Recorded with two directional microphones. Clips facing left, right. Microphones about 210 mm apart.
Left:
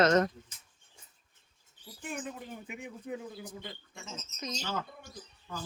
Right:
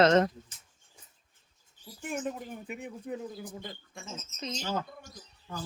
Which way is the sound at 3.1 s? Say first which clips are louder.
Right 1 dB; 45° right (ahead or behind).